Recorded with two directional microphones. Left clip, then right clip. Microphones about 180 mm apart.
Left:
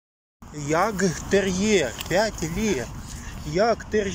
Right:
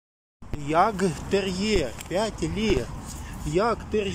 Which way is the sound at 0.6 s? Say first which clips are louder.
Right 1 dB; 5° right (ahead or behind).